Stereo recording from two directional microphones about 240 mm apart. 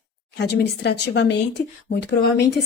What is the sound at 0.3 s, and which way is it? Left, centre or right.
Speech, left.